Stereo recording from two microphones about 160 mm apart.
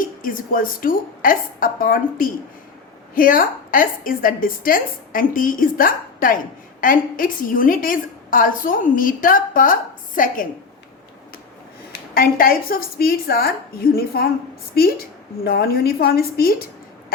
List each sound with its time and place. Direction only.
0.0 s a woman's voice: 60° left (ahead or behind)
11.9 s a woman's voice: 65° left (ahead or behind)